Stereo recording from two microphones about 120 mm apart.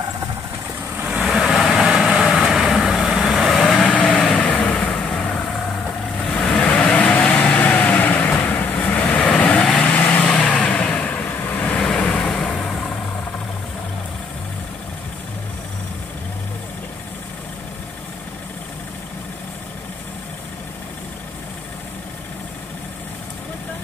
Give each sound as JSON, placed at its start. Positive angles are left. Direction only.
{"t": 1.0, "sound": "vehicle", "side_deg": -5}
{"t": 6.3, "sound": "vehicle", "side_deg": 10}
{"t": 11.8, "sound": "vehicle", "side_deg": 5}